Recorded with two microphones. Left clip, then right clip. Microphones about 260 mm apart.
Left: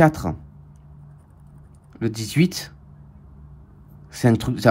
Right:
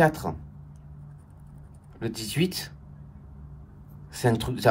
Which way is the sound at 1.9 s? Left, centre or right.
Left.